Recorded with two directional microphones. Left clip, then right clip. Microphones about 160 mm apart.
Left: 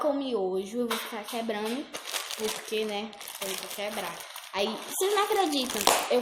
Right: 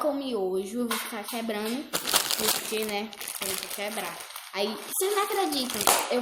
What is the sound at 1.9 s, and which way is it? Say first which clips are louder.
Crumpling: right 7 dB; 70° right (ahead or behind).